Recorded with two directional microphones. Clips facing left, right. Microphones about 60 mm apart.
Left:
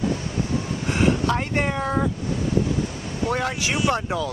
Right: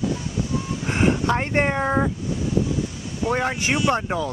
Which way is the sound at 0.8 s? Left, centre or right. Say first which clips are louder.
Even; right.